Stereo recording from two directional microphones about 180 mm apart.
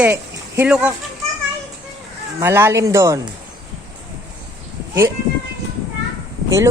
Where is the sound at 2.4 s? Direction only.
15° right (ahead or behind).